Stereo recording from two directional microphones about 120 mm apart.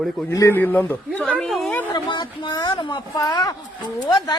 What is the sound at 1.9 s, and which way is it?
Speech, 40° left (ahead or behind).